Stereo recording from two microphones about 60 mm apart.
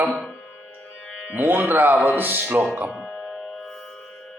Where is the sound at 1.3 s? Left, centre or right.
Right.